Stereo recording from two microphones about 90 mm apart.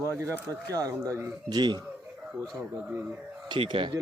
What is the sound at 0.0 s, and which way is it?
Speech, 30° right (ahead or behind).